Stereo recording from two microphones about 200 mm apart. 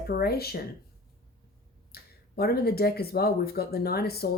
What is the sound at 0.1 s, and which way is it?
Speech, 50° left (ahead or behind).